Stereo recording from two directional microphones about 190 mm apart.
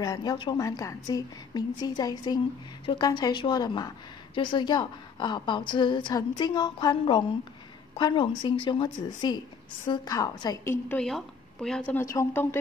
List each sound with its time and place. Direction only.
0.0 s a woman's voice: 20° left (ahead or behind)